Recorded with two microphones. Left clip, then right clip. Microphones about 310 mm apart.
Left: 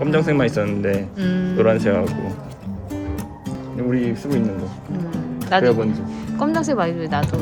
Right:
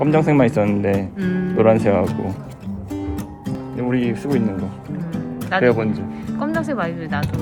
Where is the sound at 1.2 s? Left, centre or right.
Centre.